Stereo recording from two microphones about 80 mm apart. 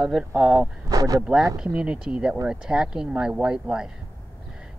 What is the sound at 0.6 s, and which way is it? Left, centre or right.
Speech, right.